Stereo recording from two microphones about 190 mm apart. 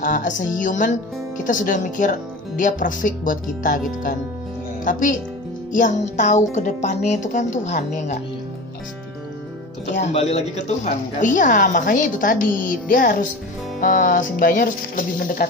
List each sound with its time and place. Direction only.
0.0 s a woman's voice: 40° left (ahead or behind)
5.7 s music: 40° left (ahead or behind)
9.8 s a woman's voice: 35° left (ahead or behind)